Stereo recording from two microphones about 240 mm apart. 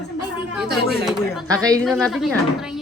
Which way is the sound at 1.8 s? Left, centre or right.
Centre.